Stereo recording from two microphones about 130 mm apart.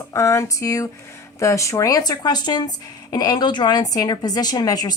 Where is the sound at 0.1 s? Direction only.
25° left (ahead or behind).